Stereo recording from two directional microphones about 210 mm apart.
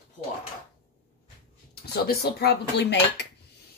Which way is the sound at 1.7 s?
50° left (ahead or behind).